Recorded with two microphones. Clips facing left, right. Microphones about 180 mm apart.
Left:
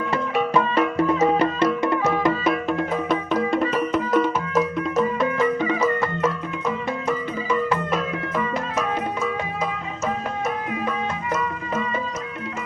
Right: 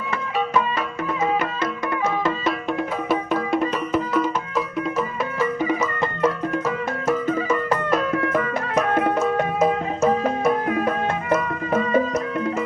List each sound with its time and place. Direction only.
0.5 s music: 30° left (ahead or behind)
2.6 s music: centre (ahead or behind)
7.3 s music: 45° right (ahead or behind)
8.2 s music: 60° right (ahead or behind)